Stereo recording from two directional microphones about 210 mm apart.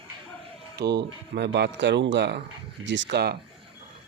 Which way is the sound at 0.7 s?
50° right (ahead or behind).